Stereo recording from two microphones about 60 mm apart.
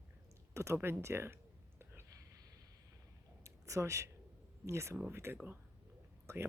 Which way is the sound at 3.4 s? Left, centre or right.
Right.